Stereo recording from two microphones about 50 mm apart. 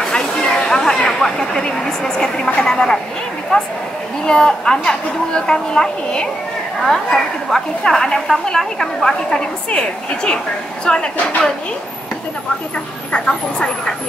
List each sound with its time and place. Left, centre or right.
0.0 s a sound: centre
1.9 s a woman's voice: centre
7.4 s a woman's voice: centre
9.7 s a woman's voice: centre
13.1 s a woman's voice: centre